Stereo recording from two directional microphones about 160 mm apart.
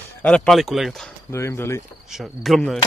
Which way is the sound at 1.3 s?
15° left (ahead or behind).